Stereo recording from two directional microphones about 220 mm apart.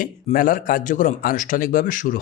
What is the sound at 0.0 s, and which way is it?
A man's voice, 40° left (ahead or behind).